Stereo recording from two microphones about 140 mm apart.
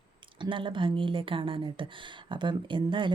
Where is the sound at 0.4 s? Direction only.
35° right (ahead or behind).